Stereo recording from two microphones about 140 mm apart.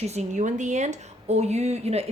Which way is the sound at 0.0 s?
50° right (ahead or behind).